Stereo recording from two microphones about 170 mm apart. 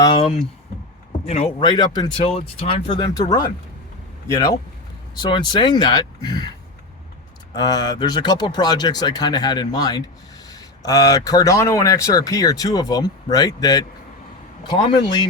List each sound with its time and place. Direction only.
0.0 s speech: 30° left (ahead or behind)
7.5 s speech: 25° left (ahead or behind)